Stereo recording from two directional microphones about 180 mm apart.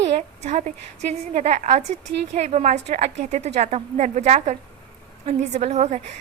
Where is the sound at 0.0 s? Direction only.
40° right (ahead or behind).